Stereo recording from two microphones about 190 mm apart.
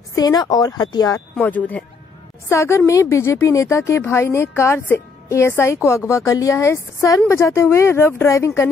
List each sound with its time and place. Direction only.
0.1 s a woman's voice: 20° left (ahead or behind)
1.3 s speech: 10° left (ahead or behind)